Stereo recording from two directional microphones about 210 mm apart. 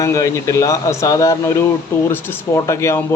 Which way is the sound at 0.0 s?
15° left (ahead or behind).